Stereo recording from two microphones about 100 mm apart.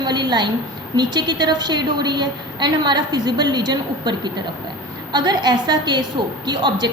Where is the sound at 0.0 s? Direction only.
45° right (ahead or behind).